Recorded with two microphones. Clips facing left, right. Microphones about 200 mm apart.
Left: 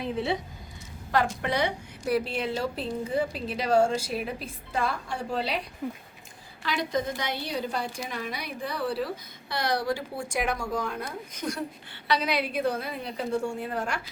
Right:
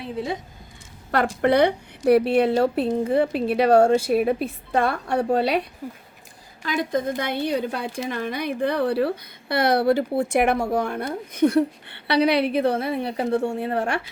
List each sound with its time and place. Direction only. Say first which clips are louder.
1.1 s a woman's voice: right 7 dB; 60° right (ahead or behind)
5.8 s speech: left 1 dB; 5° right (ahead or behind)
6.7 s a woman's voice: right 5 dB; 50° right (ahead or behind)